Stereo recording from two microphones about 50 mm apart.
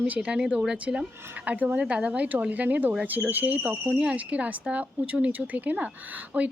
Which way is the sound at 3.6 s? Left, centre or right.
Right.